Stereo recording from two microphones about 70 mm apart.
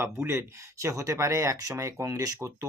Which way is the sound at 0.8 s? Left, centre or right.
Right.